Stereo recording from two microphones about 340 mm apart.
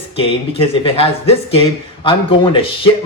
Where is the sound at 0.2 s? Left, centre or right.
Centre.